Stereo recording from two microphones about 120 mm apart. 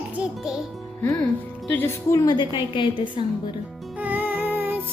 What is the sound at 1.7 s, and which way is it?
Speech, 25° left (ahead or behind).